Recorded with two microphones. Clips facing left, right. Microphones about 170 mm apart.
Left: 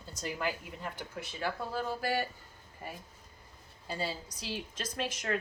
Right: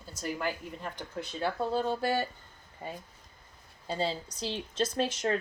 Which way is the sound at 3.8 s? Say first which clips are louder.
Right 5 dB; 30° right (ahead or behind).